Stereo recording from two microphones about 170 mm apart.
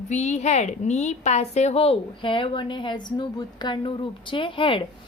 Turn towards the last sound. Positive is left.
turn(degrees=30)  # may be behind; listen again after turning